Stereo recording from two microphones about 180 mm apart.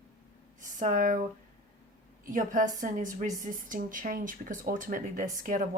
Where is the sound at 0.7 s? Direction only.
45° right (ahead or behind).